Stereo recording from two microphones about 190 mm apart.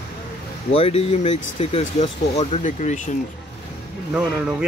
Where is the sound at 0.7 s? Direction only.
30° left (ahead or behind).